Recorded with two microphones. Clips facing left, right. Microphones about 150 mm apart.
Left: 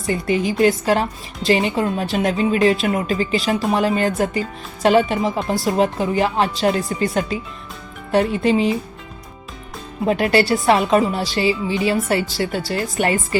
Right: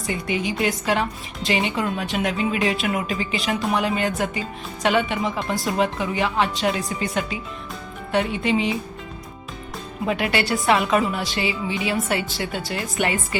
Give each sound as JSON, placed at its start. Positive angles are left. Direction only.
{"t": 0.1, "sound": "a woman's voice", "side_deg": 35}
{"t": 10.1, "sound": "a woman's voice", "side_deg": 40}